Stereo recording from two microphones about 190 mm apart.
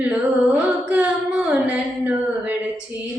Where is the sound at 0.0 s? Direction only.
5° right (ahead or behind).